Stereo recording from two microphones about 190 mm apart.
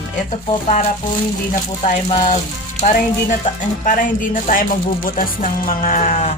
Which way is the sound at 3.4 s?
45° left (ahead or behind).